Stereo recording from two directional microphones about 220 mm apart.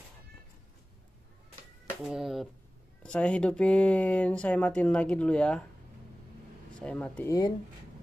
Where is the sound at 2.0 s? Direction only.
Centre (ahead or behind).